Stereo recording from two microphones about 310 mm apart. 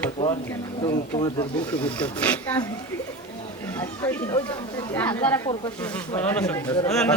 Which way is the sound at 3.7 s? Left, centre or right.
Centre.